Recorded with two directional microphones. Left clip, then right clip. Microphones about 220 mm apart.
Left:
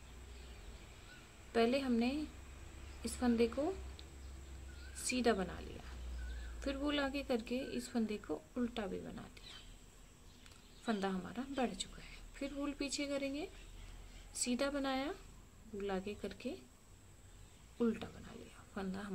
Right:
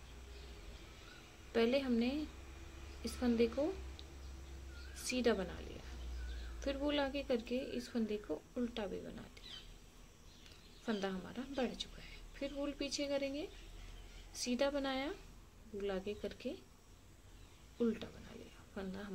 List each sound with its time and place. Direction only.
1.5 s a woman's voice: 10° left (ahead or behind)
5.0 s a woman's voice: 10° left (ahead or behind)
10.9 s a woman's voice: 10° left (ahead or behind)
17.7 s a woman's voice: 10° left (ahead or behind)